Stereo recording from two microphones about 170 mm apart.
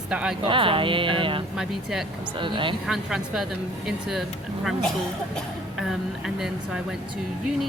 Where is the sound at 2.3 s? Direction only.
30° right (ahead or behind).